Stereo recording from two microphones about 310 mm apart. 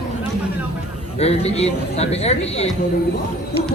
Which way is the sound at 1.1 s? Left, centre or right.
Centre.